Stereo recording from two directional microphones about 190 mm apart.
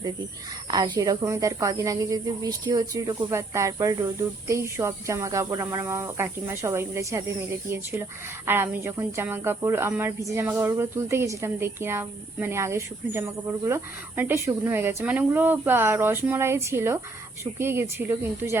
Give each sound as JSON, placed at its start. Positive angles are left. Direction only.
{"t": 0.7, "sound": "speech", "side_deg": -20}
{"t": 8.4, "sound": "speech", "side_deg": -10}